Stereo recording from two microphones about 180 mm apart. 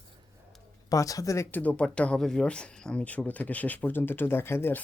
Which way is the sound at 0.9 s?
20° left (ahead or behind).